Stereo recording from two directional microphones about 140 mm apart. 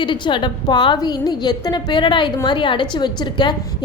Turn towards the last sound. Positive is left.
turn(degrees=30)  # may be behind; listen again after turning